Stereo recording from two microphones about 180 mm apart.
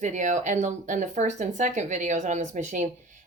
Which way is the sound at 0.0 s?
45° right (ahead or behind).